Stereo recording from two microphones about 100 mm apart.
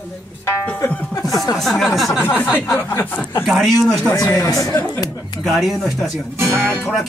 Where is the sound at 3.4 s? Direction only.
Centre (ahead or behind).